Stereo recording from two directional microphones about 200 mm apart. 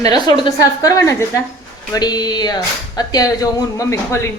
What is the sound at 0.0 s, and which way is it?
Speech, 20° left (ahead or behind).